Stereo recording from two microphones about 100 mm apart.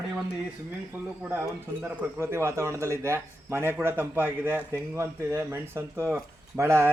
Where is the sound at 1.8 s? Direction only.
20° right (ahead or behind).